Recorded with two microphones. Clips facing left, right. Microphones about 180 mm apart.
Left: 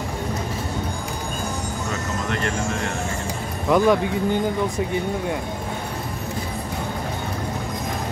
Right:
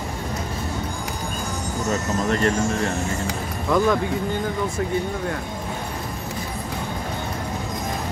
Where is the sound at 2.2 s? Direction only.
35° right (ahead or behind).